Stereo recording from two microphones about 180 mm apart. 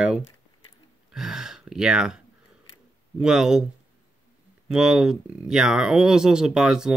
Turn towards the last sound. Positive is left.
turn(degrees=-5)  # may be behind; listen again after turning